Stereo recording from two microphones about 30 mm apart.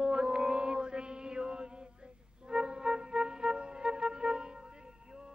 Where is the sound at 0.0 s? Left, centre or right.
Right.